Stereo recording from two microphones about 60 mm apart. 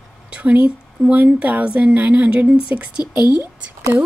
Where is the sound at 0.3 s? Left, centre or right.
Right.